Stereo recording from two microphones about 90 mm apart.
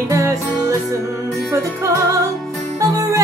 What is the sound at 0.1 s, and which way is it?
Music, 35° right (ahead or behind).